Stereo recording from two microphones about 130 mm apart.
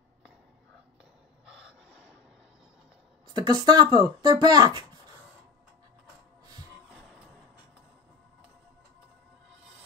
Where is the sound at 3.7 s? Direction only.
30° right (ahead or behind).